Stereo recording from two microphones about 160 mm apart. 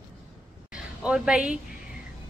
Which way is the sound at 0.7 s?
5° right (ahead or behind).